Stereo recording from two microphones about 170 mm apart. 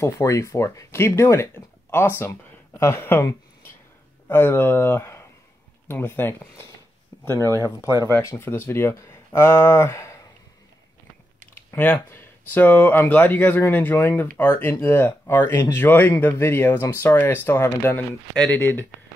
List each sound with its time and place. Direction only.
0.0 s speech: 15° left (ahead or behind)
11.5 s speech: 10° left (ahead or behind)